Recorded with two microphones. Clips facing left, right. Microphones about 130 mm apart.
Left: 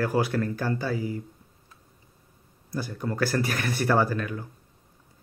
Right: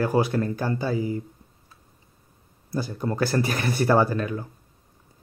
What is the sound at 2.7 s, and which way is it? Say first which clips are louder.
Speech: right 3 dB; 25° right (ahead or behind).